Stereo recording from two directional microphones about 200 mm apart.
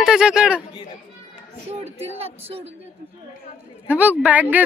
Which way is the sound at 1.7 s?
30° right (ahead or behind).